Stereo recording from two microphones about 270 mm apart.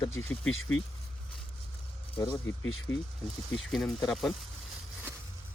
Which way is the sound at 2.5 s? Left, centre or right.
Left.